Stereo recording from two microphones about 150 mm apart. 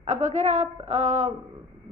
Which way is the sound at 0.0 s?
50° right (ahead or behind).